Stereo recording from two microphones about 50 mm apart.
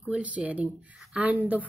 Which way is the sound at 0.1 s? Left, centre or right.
Right.